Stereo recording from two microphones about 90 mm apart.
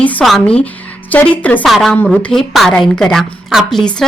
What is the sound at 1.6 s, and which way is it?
A woman's voice, centre (ahead or behind).